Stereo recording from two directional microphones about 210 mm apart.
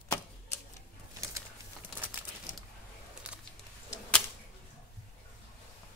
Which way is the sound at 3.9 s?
5° left (ahead or behind).